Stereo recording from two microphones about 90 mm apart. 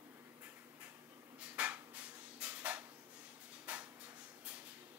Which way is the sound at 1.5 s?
15° right (ahead or behind).